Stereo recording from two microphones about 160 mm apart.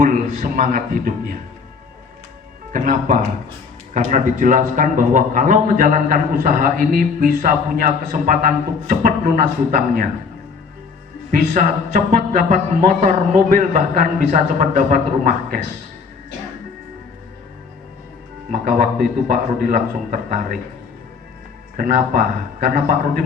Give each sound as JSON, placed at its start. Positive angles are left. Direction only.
{"t": 0.0, "sound": "a man's voice", "side_deg": -60}
{"t": 2.7, "sound": "a man's voice", "side_deg": -55}
{"t": 11.3, "sound": "a man's voice", "side_deg": -55}
{"t": 18.5, "sound": "a man's voice", "side_deg": -55}
{"t": 21.8, "sound": "a man's voice", "side_deg": -60}